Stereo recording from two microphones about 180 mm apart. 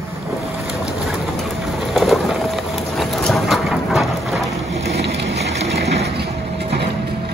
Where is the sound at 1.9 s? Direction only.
Centre (ahead or behind).